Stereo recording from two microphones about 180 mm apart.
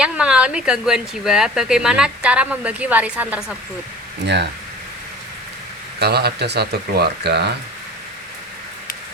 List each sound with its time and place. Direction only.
0.0 s speech: 5° right (ahead or behind)
4.2 s speech: 65° right (ahead or behind)
6.0 s speech: 65° right (ahead or behind)